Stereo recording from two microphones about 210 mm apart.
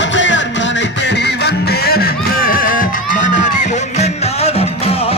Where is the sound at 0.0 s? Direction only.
60° left (ahead or behind); by 4.9 s 30° left (ahead or behind).